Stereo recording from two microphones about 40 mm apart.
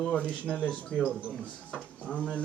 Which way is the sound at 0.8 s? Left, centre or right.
Left.